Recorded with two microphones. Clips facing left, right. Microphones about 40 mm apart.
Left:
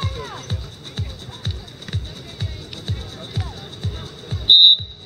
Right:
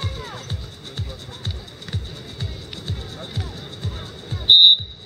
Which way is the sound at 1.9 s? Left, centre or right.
Centre.